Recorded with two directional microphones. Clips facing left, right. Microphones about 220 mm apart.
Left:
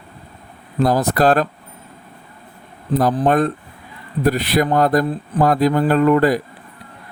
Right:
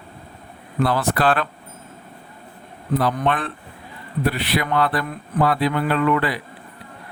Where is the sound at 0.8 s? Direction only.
40° left (ahead or behind).